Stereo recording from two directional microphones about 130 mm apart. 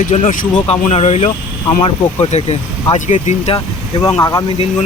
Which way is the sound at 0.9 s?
55° left (ahead or behind).